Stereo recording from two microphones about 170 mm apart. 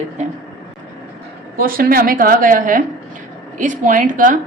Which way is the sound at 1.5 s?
60° right (ahead or behind).